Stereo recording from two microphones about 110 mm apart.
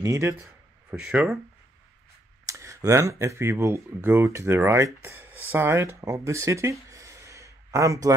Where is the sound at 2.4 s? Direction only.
25° right (ahead or behind).